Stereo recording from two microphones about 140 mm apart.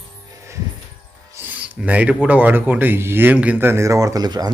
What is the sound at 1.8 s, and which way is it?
Speech, 10° right (ahead or behind).